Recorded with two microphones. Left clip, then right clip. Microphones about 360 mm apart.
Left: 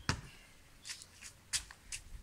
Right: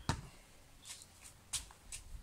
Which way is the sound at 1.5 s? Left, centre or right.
Centre.